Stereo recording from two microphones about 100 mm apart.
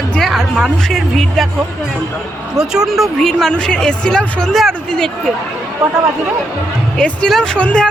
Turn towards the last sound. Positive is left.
turn(degrees=10)  # may be behind; listen again after turning